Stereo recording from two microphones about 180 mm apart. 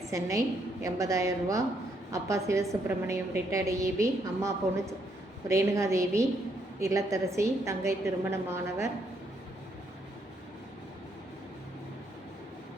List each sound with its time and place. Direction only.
0.1 s a woman's voice: 15° right (ahead or behind)